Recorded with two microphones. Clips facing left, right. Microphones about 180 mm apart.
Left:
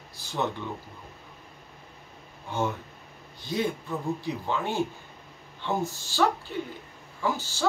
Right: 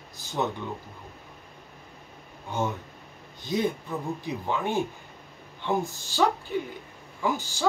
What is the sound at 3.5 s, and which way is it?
Speech, 20° right (ahead or behind).